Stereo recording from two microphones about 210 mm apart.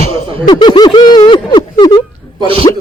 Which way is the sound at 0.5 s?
20° left (ahead or behind).